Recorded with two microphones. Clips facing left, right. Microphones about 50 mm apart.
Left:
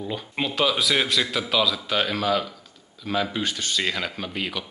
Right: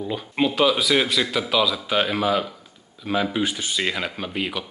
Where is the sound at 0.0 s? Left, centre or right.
Centre.